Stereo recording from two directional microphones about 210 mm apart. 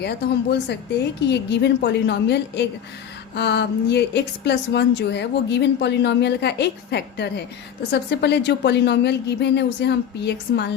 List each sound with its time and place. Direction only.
0.0 s a woman's voice: 50° left (ahead or behind)